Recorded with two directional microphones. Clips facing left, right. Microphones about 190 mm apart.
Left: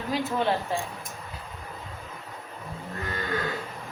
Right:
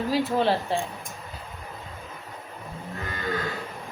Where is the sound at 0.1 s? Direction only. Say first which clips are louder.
Right 2 dB; 30° right (ahead or behind).